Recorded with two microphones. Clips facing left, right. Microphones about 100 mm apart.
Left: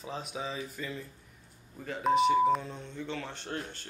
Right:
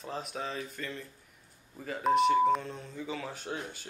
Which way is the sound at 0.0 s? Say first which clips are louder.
Even; centre (ahead or behind).